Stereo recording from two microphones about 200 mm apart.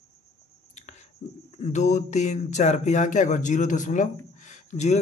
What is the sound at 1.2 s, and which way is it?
Speech, 35° left (ahead or behind).